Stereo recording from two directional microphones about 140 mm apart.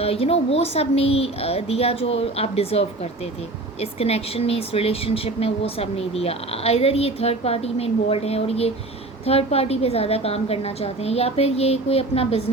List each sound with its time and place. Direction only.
0.0 s speech: 45° left (ahead or behind)